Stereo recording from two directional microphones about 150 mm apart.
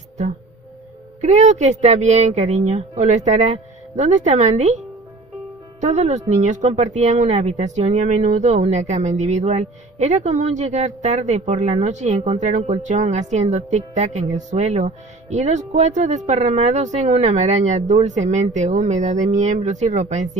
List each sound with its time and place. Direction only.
1.2 s speech: 50° right (ahead or behind)
5.8 s speech: 50° right (ahead or behind)